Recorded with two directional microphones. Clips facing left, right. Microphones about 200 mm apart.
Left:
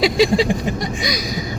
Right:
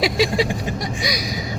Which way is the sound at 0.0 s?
5° right (ahead or behind).